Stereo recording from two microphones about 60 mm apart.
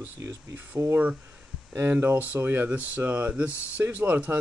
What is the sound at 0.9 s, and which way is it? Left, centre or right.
Speech, right.